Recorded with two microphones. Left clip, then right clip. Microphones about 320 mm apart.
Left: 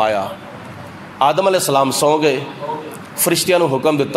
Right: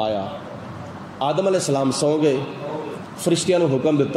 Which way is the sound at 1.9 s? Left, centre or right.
Centre.